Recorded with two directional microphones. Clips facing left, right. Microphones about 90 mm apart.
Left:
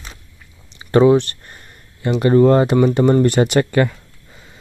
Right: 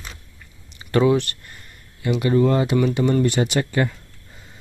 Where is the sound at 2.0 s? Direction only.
40° left (ahead or behind).